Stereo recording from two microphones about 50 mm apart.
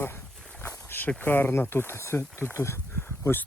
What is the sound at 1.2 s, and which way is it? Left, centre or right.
Speech, left.